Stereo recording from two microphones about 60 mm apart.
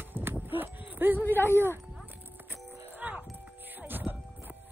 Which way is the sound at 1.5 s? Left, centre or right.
Right.